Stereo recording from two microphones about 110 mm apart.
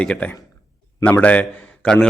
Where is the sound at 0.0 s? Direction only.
10° left (ahead or behind).